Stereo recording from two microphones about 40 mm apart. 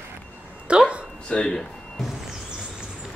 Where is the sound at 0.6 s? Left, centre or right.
Right.